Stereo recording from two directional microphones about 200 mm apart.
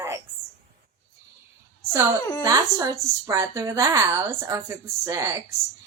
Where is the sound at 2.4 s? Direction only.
15° right (ahead or behind).